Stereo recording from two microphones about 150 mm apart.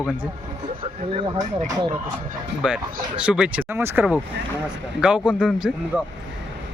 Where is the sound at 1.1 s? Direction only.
30° right (ahead or behind).